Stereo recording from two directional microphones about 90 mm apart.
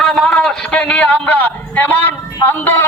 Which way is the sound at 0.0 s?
5° left (ahead or behind).